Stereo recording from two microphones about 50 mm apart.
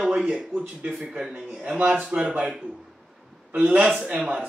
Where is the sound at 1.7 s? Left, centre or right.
Centre.